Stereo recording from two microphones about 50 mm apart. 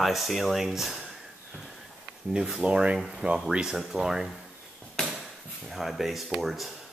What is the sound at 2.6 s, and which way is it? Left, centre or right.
Speech, right.